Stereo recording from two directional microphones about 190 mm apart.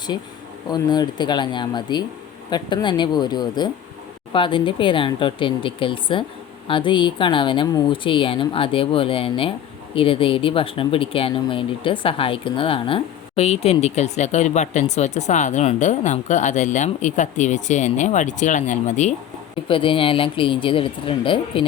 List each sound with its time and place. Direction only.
0.7 s speech: 20° left (ahead or behind); by 19.1 s 40° left (ahead or behind)
19.6 s speech: 25° left (ahead or behind)